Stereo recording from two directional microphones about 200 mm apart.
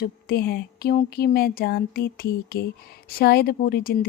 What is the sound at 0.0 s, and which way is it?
A woman's voice, 50° left (ahead or behind).